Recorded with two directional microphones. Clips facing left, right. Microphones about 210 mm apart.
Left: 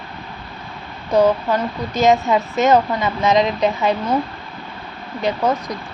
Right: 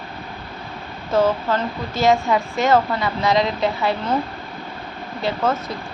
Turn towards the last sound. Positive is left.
turn(degrees=15)  # may be behind; listen again after turning